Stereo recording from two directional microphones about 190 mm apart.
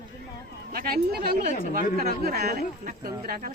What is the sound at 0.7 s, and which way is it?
Speech, 50° right (ahead or behind).